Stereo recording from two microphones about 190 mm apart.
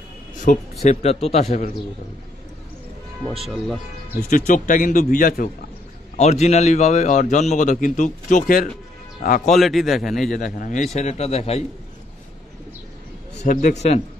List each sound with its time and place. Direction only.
0.5 s speech: 45° left (ahead or behind)
0.8 s a man's voice: 35° left (ahead or behind)
3.3 s speech: centre (ahead or behind)
4.3 s a man's voice: 45° left (ahead or behind)
9.5 s speech: centre (ahead or behind)
10.3 s a man's voice: 45° left (ahead or behind)
13.4 s a man's voice: 40° left (ahead or behind)